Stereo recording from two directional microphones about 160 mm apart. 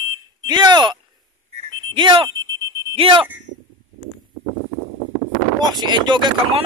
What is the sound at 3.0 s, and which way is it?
Speech, 35° right (ahead or behind).